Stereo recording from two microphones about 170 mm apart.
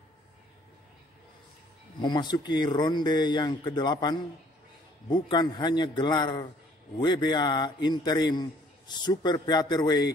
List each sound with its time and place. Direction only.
2.0 s a man's voice: 25° left (ahead or behind)